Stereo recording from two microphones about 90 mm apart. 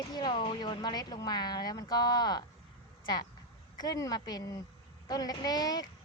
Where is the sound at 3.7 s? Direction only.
45° left (ahead or behind).